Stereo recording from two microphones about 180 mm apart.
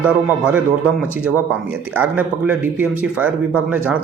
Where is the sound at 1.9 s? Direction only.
10° right (ahead or behind).